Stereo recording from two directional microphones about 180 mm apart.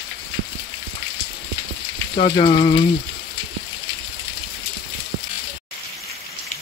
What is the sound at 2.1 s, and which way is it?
Speech, 30° left (ahead or behind).